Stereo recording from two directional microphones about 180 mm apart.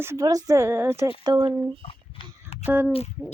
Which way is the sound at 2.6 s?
10° right (ahead or behind).